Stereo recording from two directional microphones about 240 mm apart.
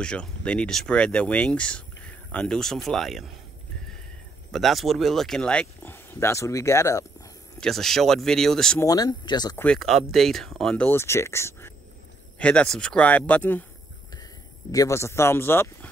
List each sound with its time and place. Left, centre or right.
0.0 s speech: centre
4.5 s speech: centre
7.6 s speech: centre
8.8 s speech: centre
9.7 s speech: centre
14.7 s speech: centre